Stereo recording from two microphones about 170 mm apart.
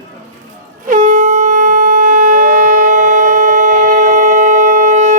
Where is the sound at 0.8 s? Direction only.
50° right (ahead or behind).